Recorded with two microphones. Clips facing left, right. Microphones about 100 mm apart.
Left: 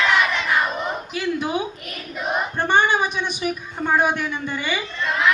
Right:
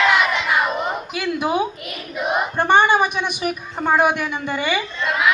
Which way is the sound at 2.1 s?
10° right (ahead or behind).